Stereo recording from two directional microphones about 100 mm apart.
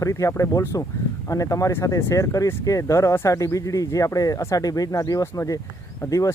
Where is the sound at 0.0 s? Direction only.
30° left (ahead or behind).